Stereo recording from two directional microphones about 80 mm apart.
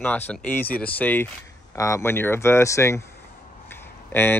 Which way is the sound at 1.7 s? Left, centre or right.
Left.